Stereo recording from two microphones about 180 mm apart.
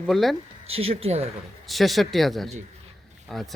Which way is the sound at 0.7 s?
35° right (ahead or behind).